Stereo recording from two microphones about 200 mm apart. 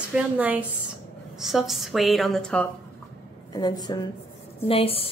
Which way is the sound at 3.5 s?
20° left (ahead or behind).